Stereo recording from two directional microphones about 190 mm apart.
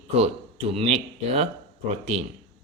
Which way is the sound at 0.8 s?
30° right (ahead or behind).